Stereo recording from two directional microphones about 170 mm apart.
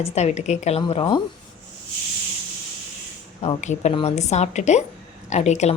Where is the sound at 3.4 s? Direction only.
45° left (ahead or behind).